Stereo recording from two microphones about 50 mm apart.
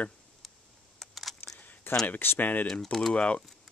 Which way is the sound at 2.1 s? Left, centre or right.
Left.